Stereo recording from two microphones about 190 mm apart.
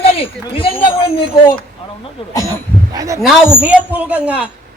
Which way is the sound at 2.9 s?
20° right (ahead or behind).